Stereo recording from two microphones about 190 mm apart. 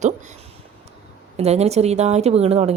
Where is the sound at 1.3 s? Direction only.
35° right (ahead or behind).